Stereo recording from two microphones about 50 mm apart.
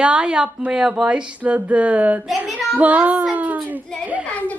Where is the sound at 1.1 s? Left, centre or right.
Right.